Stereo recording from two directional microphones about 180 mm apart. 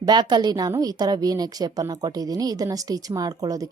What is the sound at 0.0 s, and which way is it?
A woman's voice, 25° right (ahead or behind).